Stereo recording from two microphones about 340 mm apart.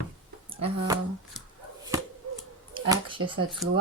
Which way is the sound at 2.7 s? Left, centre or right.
Centre.